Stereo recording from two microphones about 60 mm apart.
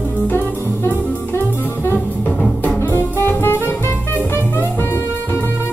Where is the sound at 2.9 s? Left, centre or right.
Left.